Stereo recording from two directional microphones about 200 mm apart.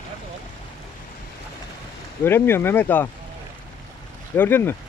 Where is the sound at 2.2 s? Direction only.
10° left (ahead or behind).